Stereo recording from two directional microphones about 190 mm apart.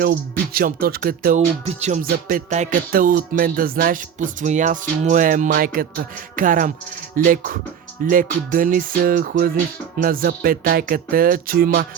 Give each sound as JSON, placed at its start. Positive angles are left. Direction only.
{"t": 0.0, "sound": "music", "side_deg": -50}
{"t": 1.6, "sound": "music", "side_deg": -35}